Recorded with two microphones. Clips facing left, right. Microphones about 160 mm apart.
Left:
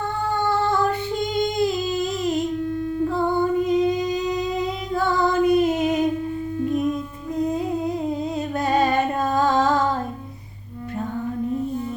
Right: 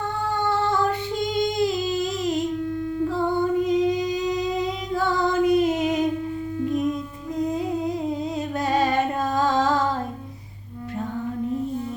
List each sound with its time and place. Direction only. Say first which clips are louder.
0.4 s female singing: left 1 dB; 55° left (ahead or behind)
3.7 s singing: left 1 dB; 55° left (ahead or behind)
7.3 s humming: left 1 dB; 55° left (ahead or behind)
8.5 s female singing: left 2 dB; 55° left (ahead or behind)